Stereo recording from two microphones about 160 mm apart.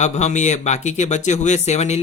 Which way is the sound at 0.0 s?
45° left (ahead or behind).